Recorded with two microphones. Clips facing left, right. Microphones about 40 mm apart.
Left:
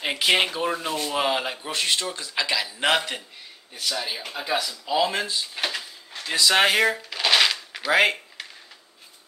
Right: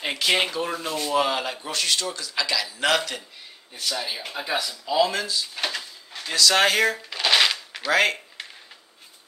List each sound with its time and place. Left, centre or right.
0.0 s a man's voice: centre
3.8 s speech: centre
4.8 s speech: centre
5.1 s a man's voice: left
5.5 s a sound: centre
6.3 s speech: centre
7.1 s shuffling cards: centre
7.9 s speech: centre